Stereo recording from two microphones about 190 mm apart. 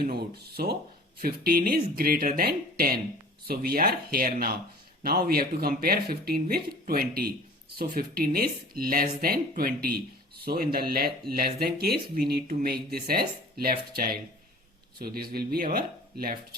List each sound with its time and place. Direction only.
0.0 s speech: 55° right (ahead or behind)